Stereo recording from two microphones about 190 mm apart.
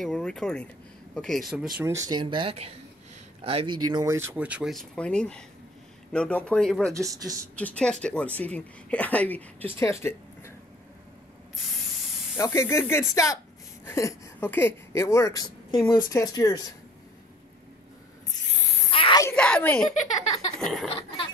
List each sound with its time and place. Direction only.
0.0 s speech: 5° left (ahead or behind)
1.8 s speech: 15° right (ahead or behind)
4.0 s speech: 15° right (ahead or behind); by 6.9 s 5° left (ahead or behind)
6.9 s speech: 15° right (ahead or behind)
7.5 s speech: 5° left (ahead or behind)
12.4 s speech: 15° left (ahead or behind)
18.9 s a sound: 30° left (ahead or behind)
19.2 s a sound: 5° left (ahead or behind)
20.6 s speech: centre (ahead or behind)